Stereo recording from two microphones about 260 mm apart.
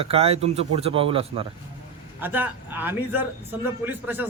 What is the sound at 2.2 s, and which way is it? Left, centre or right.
A man's voice, centre.